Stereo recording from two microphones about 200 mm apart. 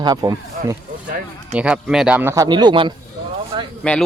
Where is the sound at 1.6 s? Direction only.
5° right (ahead or behind); by 2.9 s 25° right (ahead or behind).